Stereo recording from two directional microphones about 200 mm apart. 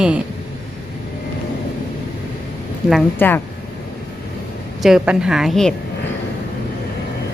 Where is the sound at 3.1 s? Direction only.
10° left (ahead or behind).